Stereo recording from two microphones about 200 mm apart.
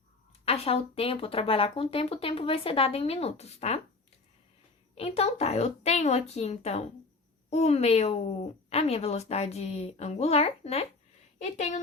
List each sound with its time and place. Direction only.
0.4 s speech: 30° left (ahead or behind)
4.9 s a woman's voice: 30° left (ahead or behind)